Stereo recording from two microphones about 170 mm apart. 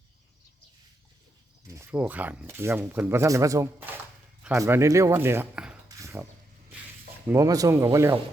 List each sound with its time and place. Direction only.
1.6 s speech: 15° right (ahead or behind)
6.0 s a sound: 15° right (ahead or behind)
7.3 s speech: 20° right (ahead or behind)